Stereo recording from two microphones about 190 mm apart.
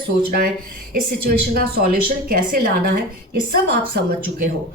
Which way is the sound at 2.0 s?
50° right (ahead or behind).